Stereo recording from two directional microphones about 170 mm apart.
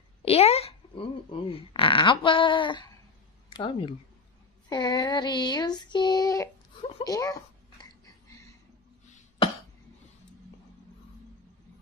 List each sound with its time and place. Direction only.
0.2 s a child's voice: 35° left (ahead or behind)
4.6 s child singing: 25° left (ahead or behind)